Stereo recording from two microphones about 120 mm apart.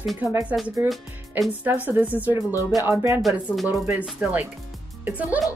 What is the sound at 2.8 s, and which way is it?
A woman's voice, 25° right (ahead or behind).